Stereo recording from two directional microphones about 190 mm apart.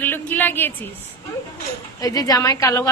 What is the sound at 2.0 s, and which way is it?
Speech, 20° left (ahead or behind).